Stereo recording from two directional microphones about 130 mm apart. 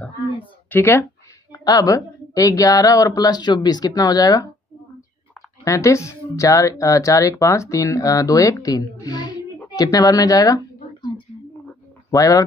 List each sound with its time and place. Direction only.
0.7 s speech: 15° left (ahead or behind)
1.5 s speech: 30° left (ahead or behind)
5.6 s speech: 25° left (ahead or behind)